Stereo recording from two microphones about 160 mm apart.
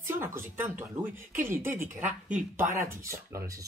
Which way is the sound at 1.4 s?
15° right (ahead or behind).